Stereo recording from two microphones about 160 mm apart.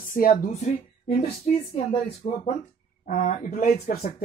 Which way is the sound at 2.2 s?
55° left (ahead or behind).